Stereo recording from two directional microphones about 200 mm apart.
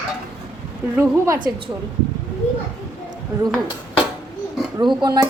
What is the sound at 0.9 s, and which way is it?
Speech, 10° right (ahead or behind).